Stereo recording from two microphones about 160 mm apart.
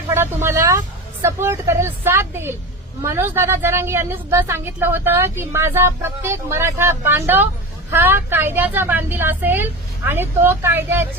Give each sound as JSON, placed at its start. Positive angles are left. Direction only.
{"t": 0.1, "sound": "a woman's voice", "side_deg": -15}